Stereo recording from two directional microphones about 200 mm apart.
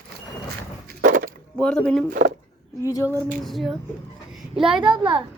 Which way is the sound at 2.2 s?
45° right (ahead or behind).